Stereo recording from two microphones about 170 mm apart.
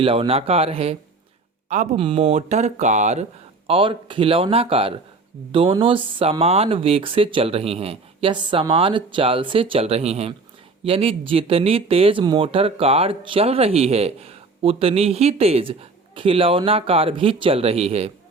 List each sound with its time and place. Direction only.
0.0 s speech: 30° right (ahead or behind)
3.7 s speech: 30° right (ahead or behind)